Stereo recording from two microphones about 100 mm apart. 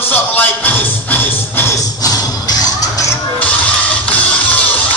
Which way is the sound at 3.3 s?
15° left (ahead or behind).